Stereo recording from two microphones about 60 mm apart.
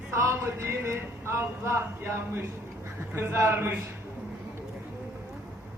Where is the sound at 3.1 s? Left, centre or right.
Right.